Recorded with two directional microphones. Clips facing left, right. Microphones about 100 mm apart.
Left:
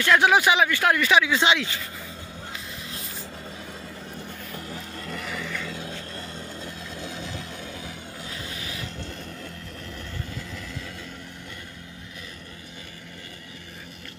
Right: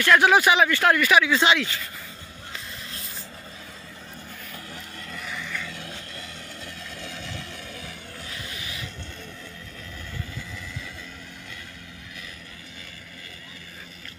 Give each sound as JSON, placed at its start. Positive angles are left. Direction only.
{"t": 0.0, "sound": "speech", "side_deg": 15}
{"t": 4.7, "sound": "vehicle", "side_deg": 40}
{"t": 5.5, "sound": "vehicle", "side_deg": 20}